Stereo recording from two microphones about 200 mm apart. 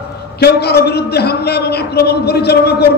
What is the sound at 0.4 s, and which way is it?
A man's voice, 55° left (ahead or behind).